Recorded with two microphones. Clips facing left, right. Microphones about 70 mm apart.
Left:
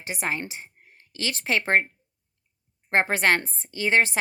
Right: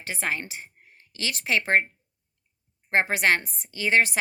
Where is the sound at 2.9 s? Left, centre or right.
Left.